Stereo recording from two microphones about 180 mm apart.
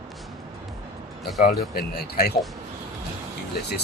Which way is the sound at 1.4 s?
55° left (ahead or behind).